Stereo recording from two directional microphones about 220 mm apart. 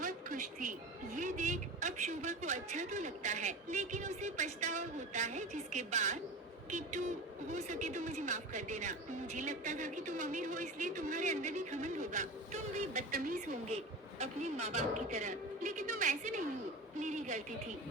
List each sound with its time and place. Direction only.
0.0 s speech: 35° right (ahead or behind)